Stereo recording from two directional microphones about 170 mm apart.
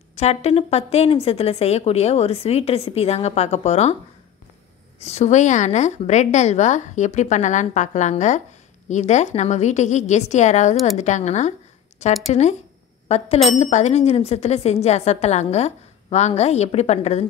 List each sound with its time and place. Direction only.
0.1 s speech: 40° left (ahead or behind)
5.0 s a woman's voice: 40° left (ahead or behind)